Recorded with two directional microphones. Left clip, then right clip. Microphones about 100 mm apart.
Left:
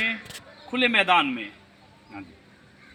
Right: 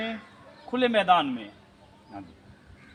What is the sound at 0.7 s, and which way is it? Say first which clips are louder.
Speech: left 1 dB; 30° right (ahead or behind).